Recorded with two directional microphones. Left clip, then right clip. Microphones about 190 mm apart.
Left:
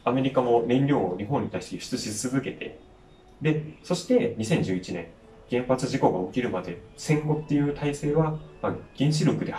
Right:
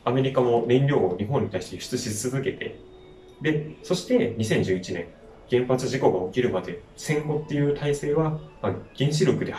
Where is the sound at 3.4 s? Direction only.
Centre (ahead or behind).